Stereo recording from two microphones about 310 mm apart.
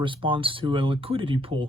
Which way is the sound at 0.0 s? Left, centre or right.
Centre.